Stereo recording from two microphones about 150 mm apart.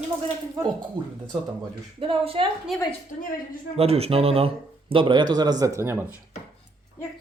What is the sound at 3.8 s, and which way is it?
Speech, 40° right (ahead or behind).